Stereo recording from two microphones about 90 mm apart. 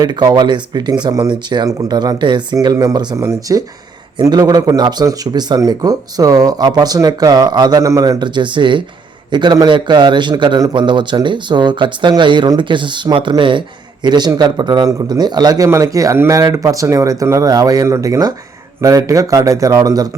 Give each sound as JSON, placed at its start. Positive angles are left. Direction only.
{"t": 0.0, "sound": "a man's voice", "side_deg": -50}
{"t": 3.2, "sound": "speech", "side_deg": -35}
{"t": 4.3, "sound": "speech", "side_deg": -45}
{"t": 8.2, "sound": "a man's voice", "side_deg": -60}
{"t": 14.8, "sound": "speech", "side_deg": -40}